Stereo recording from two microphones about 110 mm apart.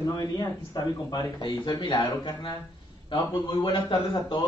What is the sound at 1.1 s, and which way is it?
A man's voice, 40° left (ahead or behind).